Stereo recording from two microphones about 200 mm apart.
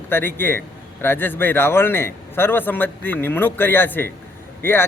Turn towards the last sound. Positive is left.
turn(degrees=10)  # may be behind; listen again after turning